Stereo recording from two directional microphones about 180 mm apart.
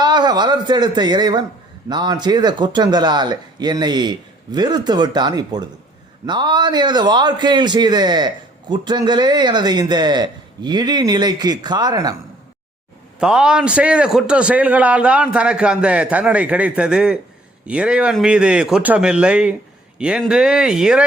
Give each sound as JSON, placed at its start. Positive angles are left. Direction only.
{"t": 0.0, "sound": "speech", "side_deg": -25}
{"t": 13.1, "sound": "a man's voice", "side_deg": -5}